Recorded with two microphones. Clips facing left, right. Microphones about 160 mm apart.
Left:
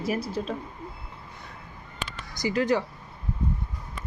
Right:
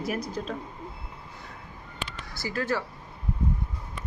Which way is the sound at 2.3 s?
15° left (ahead or behind).